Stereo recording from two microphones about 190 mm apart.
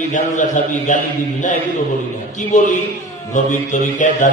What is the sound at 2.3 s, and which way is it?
Mantra, 40° left (ahead or behind).